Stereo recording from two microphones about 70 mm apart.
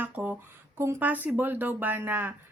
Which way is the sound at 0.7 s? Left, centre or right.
Right.